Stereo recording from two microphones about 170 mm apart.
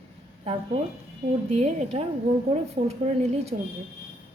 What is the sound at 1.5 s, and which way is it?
A woman's voice, 40° right (ahead or behind).